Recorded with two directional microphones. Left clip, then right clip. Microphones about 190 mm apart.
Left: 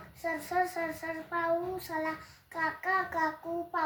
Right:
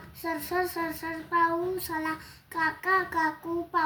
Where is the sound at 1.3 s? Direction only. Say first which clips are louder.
Right 6 dB; 10° left (ahead or behind).